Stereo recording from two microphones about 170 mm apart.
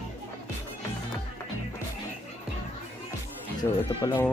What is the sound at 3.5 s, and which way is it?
Speech, 25° left (ahead or behind).